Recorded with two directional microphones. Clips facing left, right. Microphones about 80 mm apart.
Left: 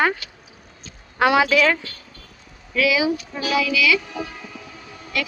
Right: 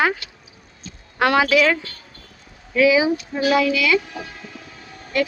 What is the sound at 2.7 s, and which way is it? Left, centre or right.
Speech, right.